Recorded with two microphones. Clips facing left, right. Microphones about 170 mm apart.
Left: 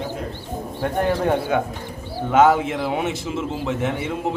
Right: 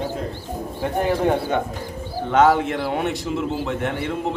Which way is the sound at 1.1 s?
Centre (ahead or behind).